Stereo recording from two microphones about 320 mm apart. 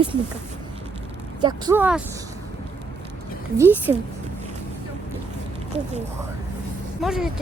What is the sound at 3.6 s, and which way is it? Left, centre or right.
Speech, centre.